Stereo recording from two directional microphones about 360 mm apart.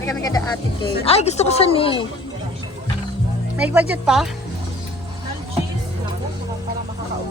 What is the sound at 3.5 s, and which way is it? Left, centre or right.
Speech, centre.